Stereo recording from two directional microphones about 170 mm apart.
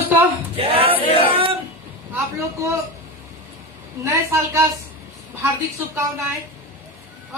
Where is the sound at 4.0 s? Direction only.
15° right (ahead or behind).